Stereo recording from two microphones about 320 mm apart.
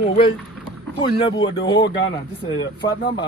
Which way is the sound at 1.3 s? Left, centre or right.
Centre.